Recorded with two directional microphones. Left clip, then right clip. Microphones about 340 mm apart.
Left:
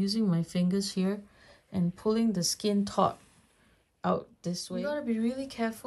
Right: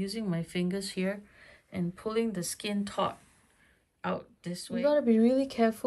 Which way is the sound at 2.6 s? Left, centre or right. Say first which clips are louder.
Left 4 dB; centre.